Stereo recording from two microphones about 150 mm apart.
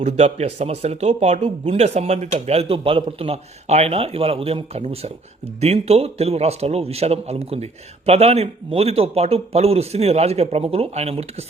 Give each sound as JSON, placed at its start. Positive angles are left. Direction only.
{"t": 0.0, "sound": "a man's voice", "side_deg": -45}